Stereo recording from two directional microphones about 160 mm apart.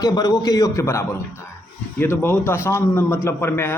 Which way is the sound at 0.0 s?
25° left (ahead or behind).